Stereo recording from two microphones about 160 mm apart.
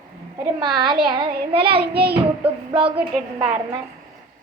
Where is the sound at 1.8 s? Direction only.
80° right.